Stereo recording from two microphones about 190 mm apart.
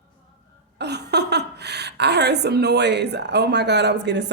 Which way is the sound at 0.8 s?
60° right (ahead or behind).